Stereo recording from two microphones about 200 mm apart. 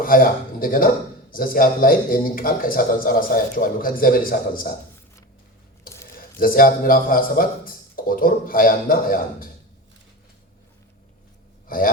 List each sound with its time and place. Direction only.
0.0 s a man's voice: 45° left (ahead or behind)
5.9 s a sound: 15° left (ahead or behind)
6.4 s a man's voice: 45° left (ahead or behind)